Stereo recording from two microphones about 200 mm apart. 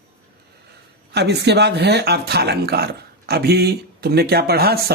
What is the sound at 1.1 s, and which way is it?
Speech, 55° right (ahead or behind).